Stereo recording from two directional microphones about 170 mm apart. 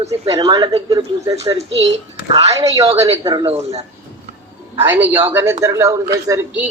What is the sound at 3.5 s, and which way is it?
Speech, 40° right (ahead or behind).